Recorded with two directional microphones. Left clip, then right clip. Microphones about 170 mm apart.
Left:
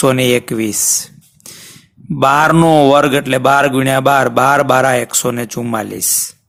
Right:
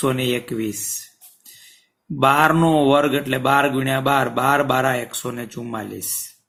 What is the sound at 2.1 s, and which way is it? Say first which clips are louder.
Speech: left 5 dB; 55° left (ahead or behind).